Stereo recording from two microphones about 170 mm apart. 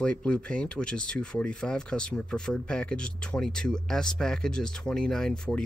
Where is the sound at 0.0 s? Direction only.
5° left (ahead or behind).